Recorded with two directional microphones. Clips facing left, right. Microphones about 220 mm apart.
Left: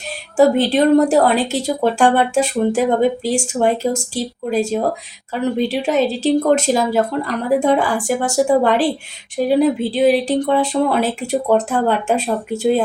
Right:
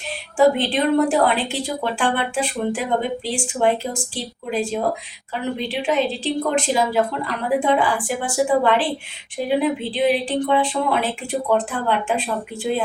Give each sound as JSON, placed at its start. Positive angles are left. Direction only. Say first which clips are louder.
{"t": 0.3, "sound": "speech", "louder": "left 4 dB", "side_deg": 40}